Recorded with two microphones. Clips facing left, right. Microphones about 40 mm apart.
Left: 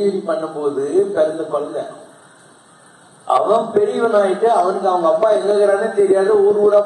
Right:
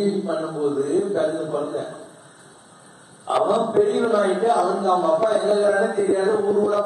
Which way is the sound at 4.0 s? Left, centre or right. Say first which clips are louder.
Left 5 dB; left.